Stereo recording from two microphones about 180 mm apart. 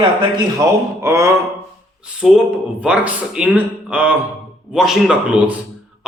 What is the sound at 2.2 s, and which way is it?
A man's voice, 5° right (ahead or behind).